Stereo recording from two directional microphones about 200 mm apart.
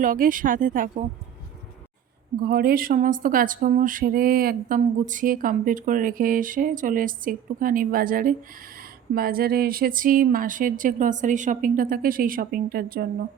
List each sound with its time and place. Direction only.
0.0 s speech: 45° right (ahead or behind)
2.4 s speech: 50° right (ahead or behind)